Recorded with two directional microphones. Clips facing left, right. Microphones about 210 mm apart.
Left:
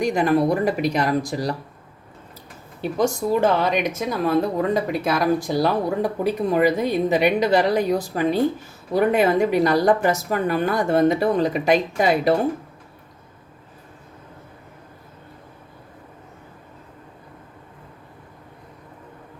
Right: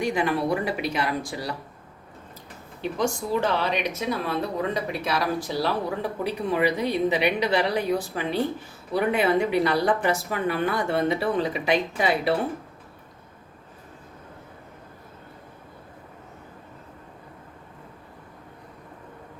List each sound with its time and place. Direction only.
0.0 s speech: 40° left (ahead or behind)
3.0 s speech: 45° left (ahead or behind)